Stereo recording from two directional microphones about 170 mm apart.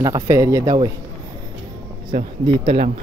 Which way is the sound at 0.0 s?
20° right (ahead or behind).